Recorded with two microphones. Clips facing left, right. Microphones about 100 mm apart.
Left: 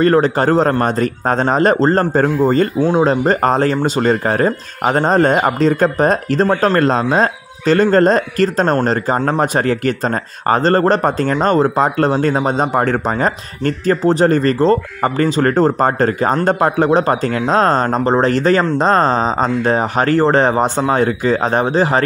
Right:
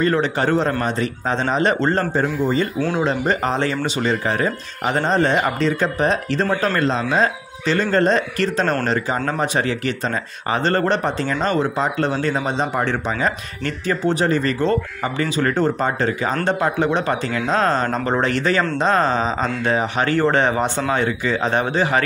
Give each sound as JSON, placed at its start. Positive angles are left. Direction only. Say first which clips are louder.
{"t": 0.0, "sound": "speech", "louder": "left 6 dB", "side_deg": 40}